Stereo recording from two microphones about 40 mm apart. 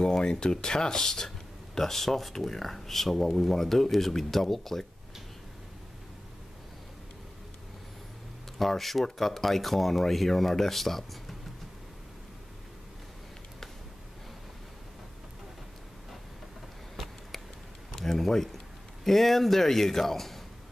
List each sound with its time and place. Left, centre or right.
0.0 s speech: centre
8.5 s speech: centre
16.9 s a sound: centre
19.0 s speech: centre